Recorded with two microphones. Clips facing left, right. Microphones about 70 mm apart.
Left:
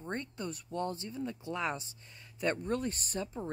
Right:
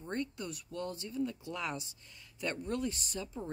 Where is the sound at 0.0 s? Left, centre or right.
Left.